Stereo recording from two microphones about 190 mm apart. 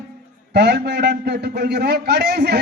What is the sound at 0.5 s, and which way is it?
A man's voice, 60° right (ahead or behind).